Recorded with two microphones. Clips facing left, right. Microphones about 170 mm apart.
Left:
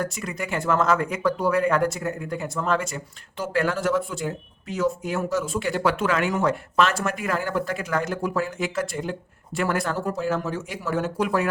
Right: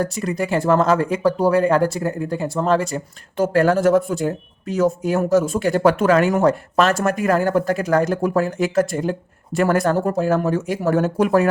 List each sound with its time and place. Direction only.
0.0 s speech: 35° right (ahead or behind)